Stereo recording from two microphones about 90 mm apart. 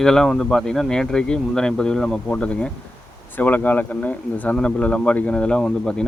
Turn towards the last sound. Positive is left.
turn(degrees=10)  # may be behind; listen again after turning